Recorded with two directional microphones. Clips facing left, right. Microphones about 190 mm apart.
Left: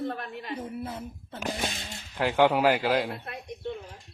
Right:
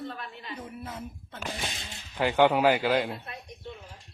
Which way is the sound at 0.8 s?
30° left (ahead or behind).